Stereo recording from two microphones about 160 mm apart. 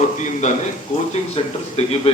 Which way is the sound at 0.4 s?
50° left (ahead or behind).